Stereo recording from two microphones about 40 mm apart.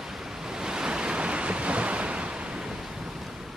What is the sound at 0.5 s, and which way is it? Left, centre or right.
Waves, centre.